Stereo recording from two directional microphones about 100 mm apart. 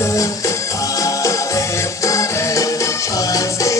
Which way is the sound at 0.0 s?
30° left (ahead or behind).